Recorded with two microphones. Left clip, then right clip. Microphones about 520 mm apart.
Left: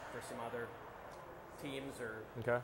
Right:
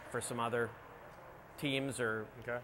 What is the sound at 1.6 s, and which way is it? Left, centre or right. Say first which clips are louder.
Speech: right 9 dB; right.